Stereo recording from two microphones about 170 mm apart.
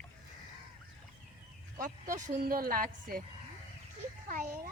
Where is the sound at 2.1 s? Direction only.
50° right (ahead or behind).